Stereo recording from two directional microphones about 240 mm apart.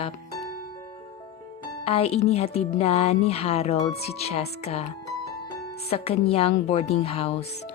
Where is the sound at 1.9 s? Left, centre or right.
Left.